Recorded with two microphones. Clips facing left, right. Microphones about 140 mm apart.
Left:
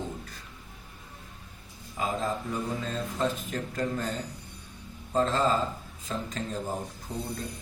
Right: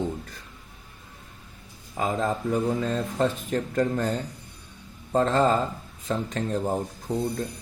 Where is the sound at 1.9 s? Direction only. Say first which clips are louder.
Right 4 dB; 55° right (ahead or behind).